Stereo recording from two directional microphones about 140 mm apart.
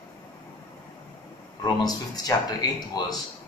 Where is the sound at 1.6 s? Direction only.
30° left (ahead or behind).